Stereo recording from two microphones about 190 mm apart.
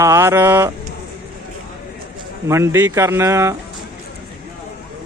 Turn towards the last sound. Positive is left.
turn(degrees=-15)  # may be behind; listen again after turning